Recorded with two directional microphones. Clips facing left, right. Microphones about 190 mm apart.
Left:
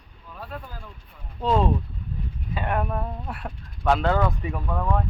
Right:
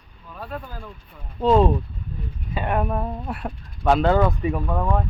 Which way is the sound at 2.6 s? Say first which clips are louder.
Right 3 dB; 15° right (ahead or behind).